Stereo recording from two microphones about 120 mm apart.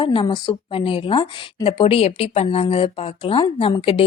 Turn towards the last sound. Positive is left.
turn(degrees=50)  # may be behind; listen again after turning